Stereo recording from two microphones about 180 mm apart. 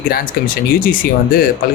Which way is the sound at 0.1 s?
50° left (ahead or behind).